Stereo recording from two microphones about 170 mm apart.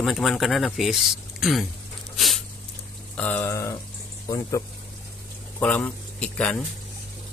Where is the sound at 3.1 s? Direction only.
10° left (ahead or behind).